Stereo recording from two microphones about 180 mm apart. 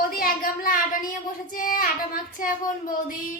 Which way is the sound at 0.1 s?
55° left (ahead or behind).